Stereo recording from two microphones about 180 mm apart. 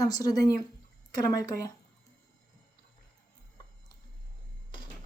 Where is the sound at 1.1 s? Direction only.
20° left (ahead or behind).